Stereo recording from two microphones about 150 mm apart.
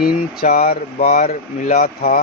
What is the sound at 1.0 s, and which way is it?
Speech, 55° left (ahead or behind).